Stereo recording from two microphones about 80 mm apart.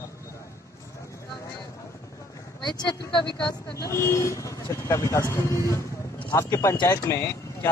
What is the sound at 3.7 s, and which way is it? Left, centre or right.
Speech, left.